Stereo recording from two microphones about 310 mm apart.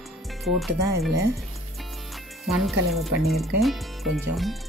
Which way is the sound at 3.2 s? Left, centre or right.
Centre.